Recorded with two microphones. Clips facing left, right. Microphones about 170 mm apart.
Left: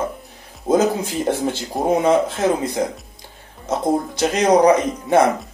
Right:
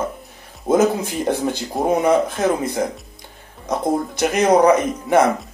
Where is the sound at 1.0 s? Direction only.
20° left (ahead or behind).